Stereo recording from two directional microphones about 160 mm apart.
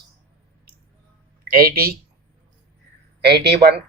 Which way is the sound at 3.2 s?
90° right.